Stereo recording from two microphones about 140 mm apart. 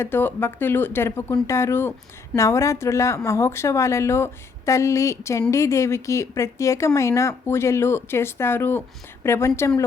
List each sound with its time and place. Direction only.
0.0 s a woman's voice: 15° left (ahead or behind)